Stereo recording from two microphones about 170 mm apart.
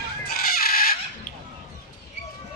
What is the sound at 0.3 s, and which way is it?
Fowl, 65° left (ahead or behind).